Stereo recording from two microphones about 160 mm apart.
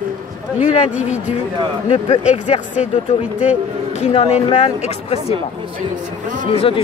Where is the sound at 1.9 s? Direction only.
45° left (ahead or behind).